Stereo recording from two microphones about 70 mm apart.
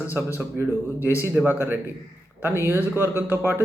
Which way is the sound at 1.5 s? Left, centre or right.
Right.